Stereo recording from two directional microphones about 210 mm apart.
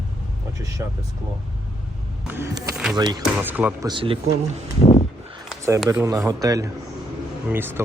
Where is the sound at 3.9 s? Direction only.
25° right (ahead or behind).